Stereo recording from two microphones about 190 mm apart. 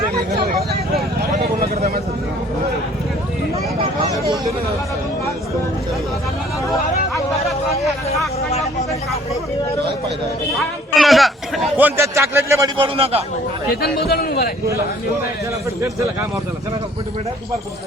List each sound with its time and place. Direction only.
1.7 s vehicle: 55° right (ahead or behind)
7.1 s hubbub: centre (ahead or behind)
10.9 s a sound: centre (ahead or behind); by 12.7 s 15° right (ahead or behind)
12.7 s a man's voice: 30° right (ahead or behind)
13.8 s a man's voice: 55° left (ahead or behind)